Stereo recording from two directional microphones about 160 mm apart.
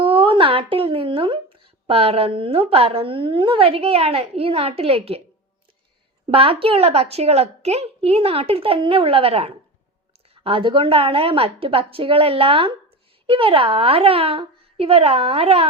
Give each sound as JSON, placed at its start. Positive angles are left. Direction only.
{"t": 0.0, "sound": "a woman's voice", "side_deg": -35}
{"t": 6.3, "sound": "a woman's voice", "side_deg": -35}